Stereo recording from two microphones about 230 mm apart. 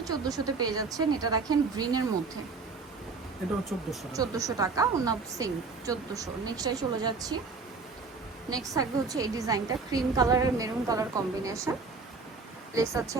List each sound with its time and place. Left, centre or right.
0.1 s a woman's voice: centre
3.7 s speech: centre
4.1 s a woman's voice: centre
8.4 s a woman's voice: centre
12.7 s a woman's voice: centre